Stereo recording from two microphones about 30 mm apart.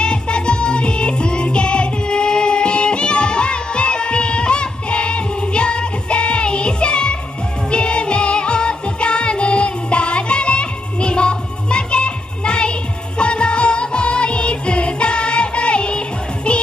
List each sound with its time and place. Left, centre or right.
0.0 s music: left